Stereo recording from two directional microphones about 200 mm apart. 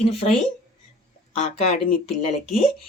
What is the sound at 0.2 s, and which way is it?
Speech, 30° left (ahead or behind).